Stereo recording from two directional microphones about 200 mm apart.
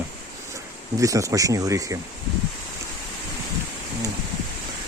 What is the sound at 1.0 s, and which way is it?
Speech, 15° right (ahead or behind).